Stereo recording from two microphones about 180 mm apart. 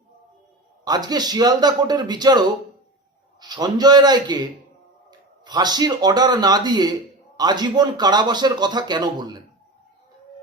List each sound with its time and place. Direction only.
0.9 s speech: 20° right (ahead or behind)
3.4 s speech: 20° right (ahead or behind)
5.5 s speech: 25° right (ahead or behind)